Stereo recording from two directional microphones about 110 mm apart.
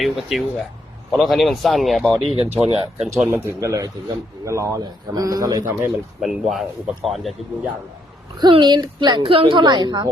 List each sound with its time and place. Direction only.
0.0 s speech: centre (ahead or behind)
2.4 s speech: 75° right (ahead or behind)
3.2 s a man's voice: 20° right (ahead or behind)
5.7 s speech: centre (ahead or behind)
8.4 s a woman's voice: 45° right (ahead or behind)